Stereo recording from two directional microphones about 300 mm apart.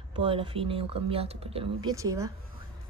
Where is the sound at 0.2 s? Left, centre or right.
Centre.